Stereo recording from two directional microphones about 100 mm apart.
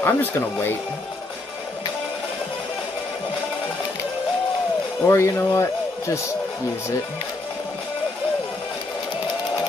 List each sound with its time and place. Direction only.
0.0 s speech: 20° left (ahead or behind)
5.0 s speech: 25° left (ahead or behind)